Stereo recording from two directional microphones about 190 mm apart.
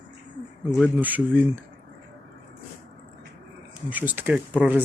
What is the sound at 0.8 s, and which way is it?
Speech, 10° right (ahead or behind).